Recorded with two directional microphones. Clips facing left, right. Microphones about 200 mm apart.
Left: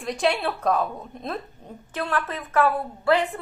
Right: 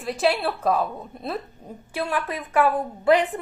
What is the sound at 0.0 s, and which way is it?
A woman's voice, 5° right (ahead or behind).